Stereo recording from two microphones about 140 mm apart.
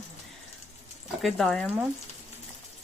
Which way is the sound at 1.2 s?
Centre (ahead or behind).